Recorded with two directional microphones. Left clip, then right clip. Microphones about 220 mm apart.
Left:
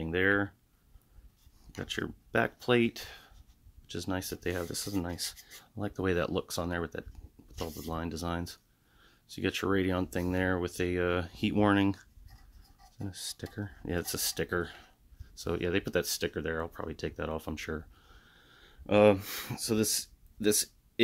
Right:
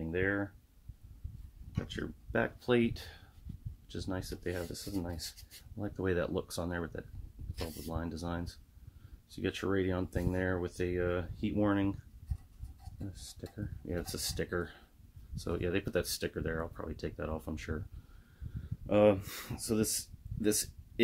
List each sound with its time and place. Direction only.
0.0 s speech: 40° left (ahead or behind)
1.7 s speech: 35° left (ahead or behind)
13.1 s speech: 35° left (ahead or behind)